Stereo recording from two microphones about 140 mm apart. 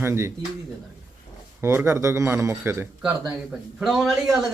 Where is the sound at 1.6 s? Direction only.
20° right (ahead or behind).